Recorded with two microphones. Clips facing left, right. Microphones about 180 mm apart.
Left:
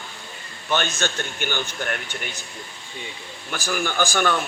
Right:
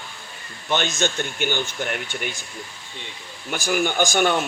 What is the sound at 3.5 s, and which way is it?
Speech, 15° right (ahead or behind).